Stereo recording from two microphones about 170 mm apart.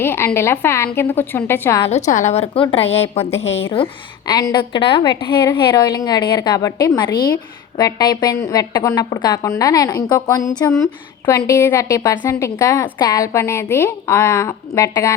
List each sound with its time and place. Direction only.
0.0 s a woman's voice: 15° left (ahead or behind)
1.9 s a woman's voice: 45° left (ahead or behind); by 15.1 s 20° left (ahead or behind)